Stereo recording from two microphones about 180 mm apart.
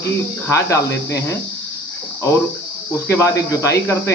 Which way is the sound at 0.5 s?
15° left (ahead or behind).